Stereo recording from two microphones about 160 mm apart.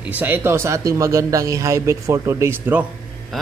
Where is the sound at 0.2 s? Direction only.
15° right (ahead or behind).